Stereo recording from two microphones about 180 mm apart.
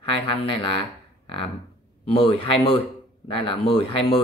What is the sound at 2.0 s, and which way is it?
A man's voice, 30° left (ahead or behind).